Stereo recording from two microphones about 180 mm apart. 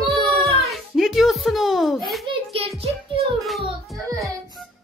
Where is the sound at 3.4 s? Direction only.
Centre (ahead or behind).